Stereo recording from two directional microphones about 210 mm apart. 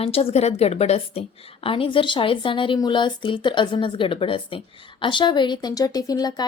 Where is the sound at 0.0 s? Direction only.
30° left (ahead or behind).